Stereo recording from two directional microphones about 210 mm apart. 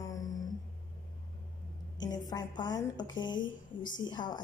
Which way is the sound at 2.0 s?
20° left (ahead or behind).